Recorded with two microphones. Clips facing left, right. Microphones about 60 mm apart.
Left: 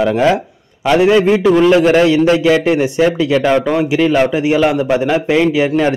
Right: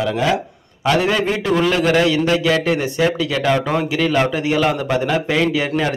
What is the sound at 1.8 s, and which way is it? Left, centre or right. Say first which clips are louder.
A man's voice: left 6 dB; left.